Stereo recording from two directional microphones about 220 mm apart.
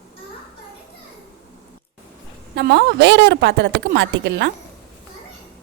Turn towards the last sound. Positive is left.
turn(degrees=-50)  # may be behind; listen again after turning